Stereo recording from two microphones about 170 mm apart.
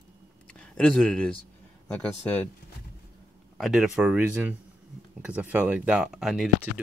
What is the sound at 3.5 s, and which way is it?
Speech, centre (ahead or behind).